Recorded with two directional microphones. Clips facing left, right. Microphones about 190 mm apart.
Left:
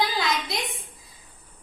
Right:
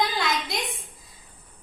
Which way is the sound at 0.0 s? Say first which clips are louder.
Even; centre (ahead or behind).